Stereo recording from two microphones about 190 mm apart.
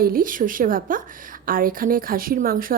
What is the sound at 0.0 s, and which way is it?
A woman's voice, 50° right (ahead or behind).